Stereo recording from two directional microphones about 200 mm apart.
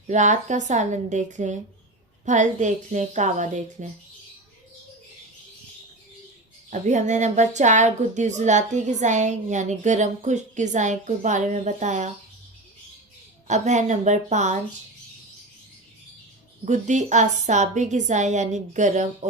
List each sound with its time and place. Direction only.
0.1 s a woman's voice: 35° right (ahead or behind)
6.7 s a woman's voice: 35° right (ahead or behind)
13.5 s a woman's voice: 35° right (ahead or behind)
16.6 s a woman's voice: 35° right (ahead or behind)